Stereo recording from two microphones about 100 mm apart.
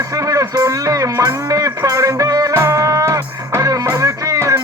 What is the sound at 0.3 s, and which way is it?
Music, 35° right (ahead or behind).